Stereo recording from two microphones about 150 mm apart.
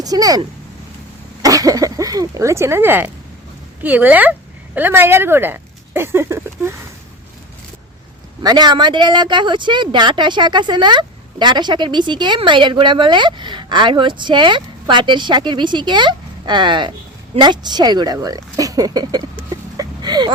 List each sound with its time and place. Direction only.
0.0 s speech: 25° right (ahead or behind)
8.4 s speech: 30° right (ahead or behind)